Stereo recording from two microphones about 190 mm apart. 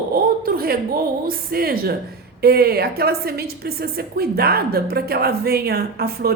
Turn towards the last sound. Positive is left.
turn(degrees=-55)  # may be behind; listen again after turning